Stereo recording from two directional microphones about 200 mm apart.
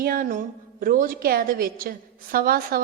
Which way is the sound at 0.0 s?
45° right (ahead or behind).